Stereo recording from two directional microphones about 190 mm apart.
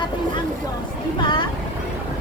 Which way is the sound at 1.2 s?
25° left (ahead or behind).